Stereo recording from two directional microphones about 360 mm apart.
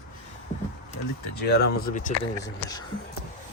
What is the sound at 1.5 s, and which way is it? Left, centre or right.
Speech, left.